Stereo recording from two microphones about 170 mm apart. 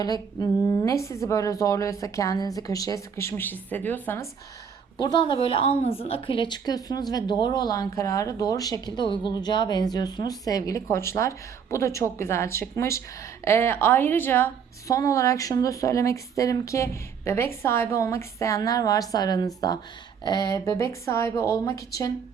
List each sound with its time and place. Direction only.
0.0 s a woman's voice: 20° left (ahead or behind)
4.9 s a woman's voice: 25° left (ahead or behind)